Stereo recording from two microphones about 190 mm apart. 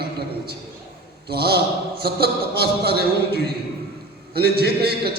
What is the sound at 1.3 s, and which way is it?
A man's voice, 55° right (ahead or behind).